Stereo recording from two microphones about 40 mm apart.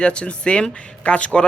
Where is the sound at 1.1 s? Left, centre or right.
Left.